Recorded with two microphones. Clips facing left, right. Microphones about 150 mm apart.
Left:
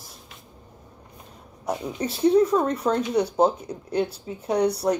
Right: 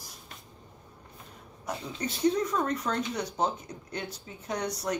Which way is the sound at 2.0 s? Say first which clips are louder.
Left 8 dB; 30° left (ahead or behind).